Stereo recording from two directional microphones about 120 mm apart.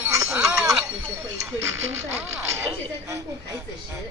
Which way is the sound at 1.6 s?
25° right (ahead or behind).